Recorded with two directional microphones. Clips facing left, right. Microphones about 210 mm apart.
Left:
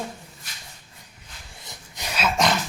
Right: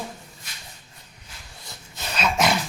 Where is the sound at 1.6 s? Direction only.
15° left (ahead or behind).